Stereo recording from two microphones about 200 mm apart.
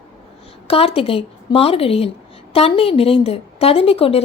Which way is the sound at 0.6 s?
30° left (ahead or behind).